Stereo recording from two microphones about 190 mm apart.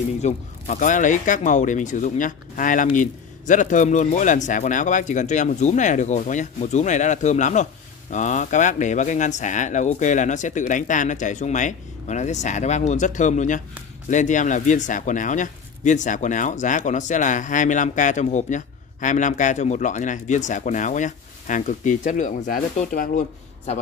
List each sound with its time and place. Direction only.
0.2 s speech: 40° left (ahead or behind)